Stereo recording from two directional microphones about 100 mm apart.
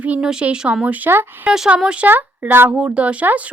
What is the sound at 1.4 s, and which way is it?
A woman's voice, 10° right (ahead or behind).